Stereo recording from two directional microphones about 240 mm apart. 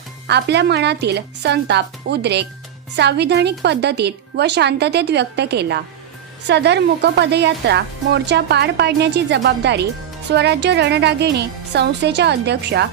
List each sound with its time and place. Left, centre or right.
0.3 s speech: right